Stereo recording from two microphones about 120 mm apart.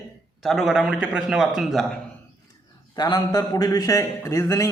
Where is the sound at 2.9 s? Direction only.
35° left (ahead or behind).